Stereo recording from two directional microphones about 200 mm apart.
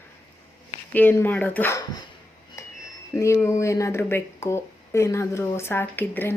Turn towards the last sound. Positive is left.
turn(degrees=10)  # may be behind; listen again after turning